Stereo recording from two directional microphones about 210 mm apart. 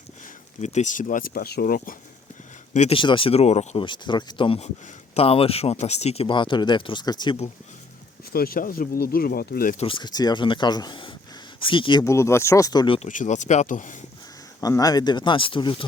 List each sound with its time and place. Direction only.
0.6 s speech: 35° left (ahead or behind)
2.7 s speech: 30° left (ahead or behind)
8.2 s speech: 45° left (ahead or behind)
9.8 s speech: 20° left (ahead or behind)
13.1 s speech: 35° left (ahead or behind)
14.6 s speech: 15° left (ahead or behind)